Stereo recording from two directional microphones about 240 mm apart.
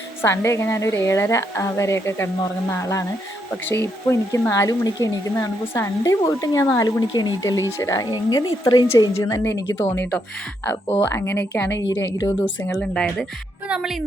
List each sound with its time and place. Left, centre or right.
0.2 s speech: centre
12.7 s speech: centre